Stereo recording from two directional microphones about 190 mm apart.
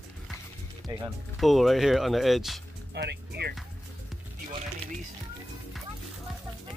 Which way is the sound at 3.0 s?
60° right (ahead or behind).